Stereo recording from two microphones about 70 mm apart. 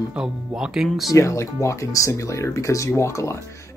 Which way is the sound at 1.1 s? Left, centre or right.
Left.